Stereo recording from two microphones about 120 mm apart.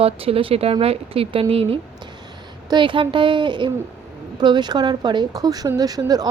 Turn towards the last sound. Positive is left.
turn(degrees=-30)  # may be behind; listen again after turning